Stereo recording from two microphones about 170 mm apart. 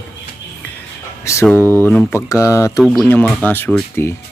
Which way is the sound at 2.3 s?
20° left (ahead or behind).